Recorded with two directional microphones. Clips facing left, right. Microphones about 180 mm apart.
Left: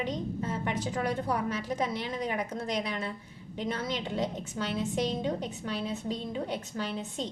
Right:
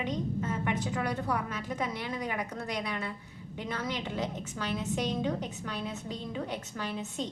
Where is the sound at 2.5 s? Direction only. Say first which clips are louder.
Left 2 dB; 30° left (ahead or behind).